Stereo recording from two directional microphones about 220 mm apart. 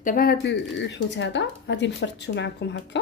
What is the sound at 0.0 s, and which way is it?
A woman's voice, 40° left (ahead or behind).